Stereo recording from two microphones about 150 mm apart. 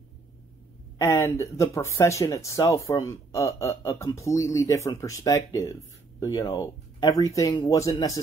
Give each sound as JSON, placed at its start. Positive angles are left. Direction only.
{"t": 0.9, "sound": "speech", "side_deg": 20}